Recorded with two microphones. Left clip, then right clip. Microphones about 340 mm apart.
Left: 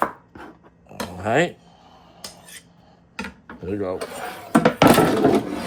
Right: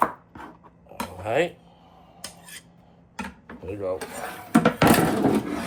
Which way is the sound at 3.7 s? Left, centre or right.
Left.